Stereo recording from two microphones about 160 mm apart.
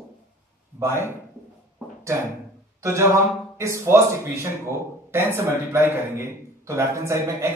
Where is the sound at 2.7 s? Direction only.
15° right (ahead or behind).